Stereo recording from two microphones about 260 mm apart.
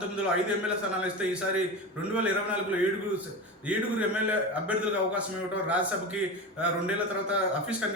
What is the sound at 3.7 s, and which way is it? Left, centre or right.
A man's voice, centre.